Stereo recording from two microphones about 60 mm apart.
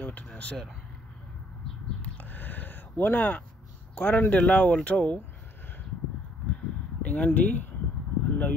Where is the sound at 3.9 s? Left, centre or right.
Left.